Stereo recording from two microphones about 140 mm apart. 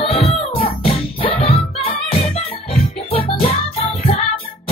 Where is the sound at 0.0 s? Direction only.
45° left (ahead or behind).